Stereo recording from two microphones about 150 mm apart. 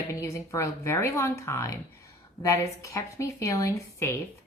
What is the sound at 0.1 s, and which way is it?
A woman's voice, 20° left (ahead or behind).